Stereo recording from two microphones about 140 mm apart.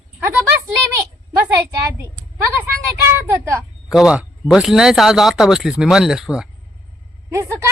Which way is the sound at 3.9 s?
5° right (ahead or behind).